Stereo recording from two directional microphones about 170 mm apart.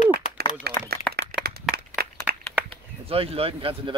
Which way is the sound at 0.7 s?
70° right (ahead or behind).